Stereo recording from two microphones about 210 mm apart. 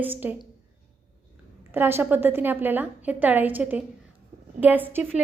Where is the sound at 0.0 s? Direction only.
10° right (ahead or behind).